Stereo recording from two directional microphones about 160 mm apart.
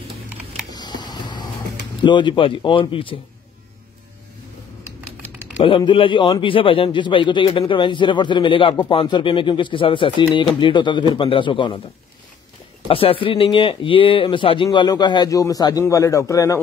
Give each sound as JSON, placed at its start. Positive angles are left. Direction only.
{"t": 0.7, "sound": "a sound", "side_deg": 25}
{"t": 2.0, "sound": "a man's voice", "side_deg": 30}
{"t": 5.6, "sound": "a man's voice", "side_deg": 30}
{"t": 12.8, "sound": "a man's voice", "side_deg": 35}